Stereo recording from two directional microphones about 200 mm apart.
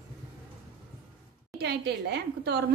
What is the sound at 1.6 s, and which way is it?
A woman's voice, 55° right (ahead or behind).